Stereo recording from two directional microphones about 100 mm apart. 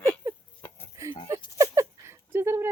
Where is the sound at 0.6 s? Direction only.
20° left (ahead or behind).